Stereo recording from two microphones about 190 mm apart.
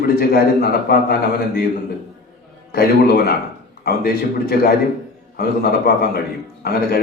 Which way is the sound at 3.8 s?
55° left (ahead or behind).